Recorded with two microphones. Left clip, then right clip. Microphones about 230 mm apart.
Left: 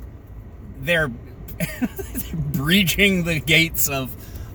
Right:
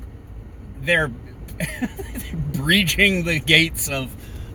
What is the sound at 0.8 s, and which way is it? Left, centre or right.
Speech, centre.